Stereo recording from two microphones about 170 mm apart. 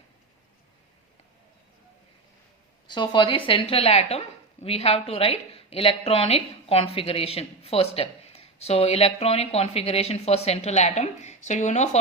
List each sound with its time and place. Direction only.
2.8 s a woman's voice: 25° left (ahead or behind); by 11.9 s 45° left (ahead or behind)